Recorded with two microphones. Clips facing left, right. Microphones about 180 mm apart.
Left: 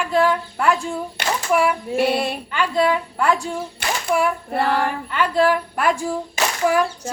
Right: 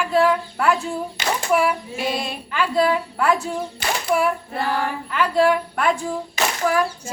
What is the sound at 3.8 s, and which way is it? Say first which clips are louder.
Speech: even; 60° left (ahead or behind).